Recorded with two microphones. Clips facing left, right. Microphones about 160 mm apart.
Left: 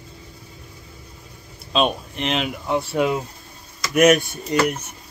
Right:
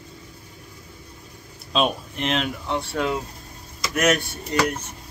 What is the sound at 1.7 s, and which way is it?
Speech, centre (ahead or behind).